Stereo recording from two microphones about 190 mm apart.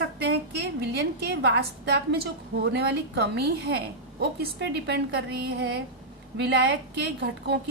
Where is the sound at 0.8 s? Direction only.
60° right (ahead or behind).